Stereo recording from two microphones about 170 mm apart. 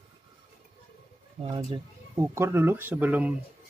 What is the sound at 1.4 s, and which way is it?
Speech, 25° right (ahead or behind).